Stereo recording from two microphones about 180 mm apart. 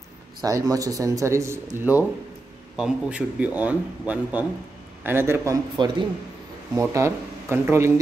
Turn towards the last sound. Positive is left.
turn(degrees=-15)  # may be behind; listen again after turning